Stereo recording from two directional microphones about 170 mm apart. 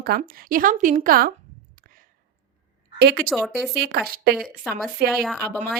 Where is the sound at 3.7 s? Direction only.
70° right (ahead or behind).